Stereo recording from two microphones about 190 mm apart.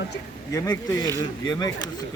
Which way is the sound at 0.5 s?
20° left (ahead or behind).